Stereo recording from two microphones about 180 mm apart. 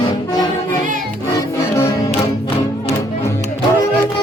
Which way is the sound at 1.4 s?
15° left (ahead or behind).